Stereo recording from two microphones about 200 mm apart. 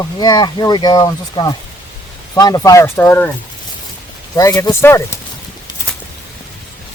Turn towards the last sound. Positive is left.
turn(degrees=15)  # may be behind; listen again after turning